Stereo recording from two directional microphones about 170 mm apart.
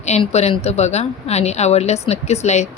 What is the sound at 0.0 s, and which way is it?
A woman's voice, 40° left (ahead or behind).